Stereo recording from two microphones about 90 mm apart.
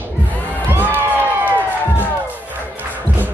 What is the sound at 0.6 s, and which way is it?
Music, 25° right (ahead or behind).